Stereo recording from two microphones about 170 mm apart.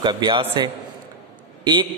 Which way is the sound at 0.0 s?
25° right (ahead or behind).